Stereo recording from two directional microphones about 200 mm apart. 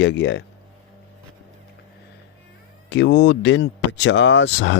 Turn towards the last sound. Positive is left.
turn(degrees=65)  # may be behind; listen again after turning